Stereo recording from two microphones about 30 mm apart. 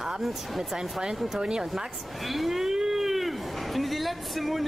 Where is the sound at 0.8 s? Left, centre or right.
Right.